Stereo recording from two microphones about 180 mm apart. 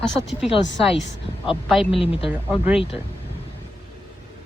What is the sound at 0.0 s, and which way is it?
Speech, centre (ahead or behind).